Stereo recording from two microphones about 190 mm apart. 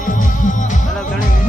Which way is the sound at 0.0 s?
45° left (ahead or behind).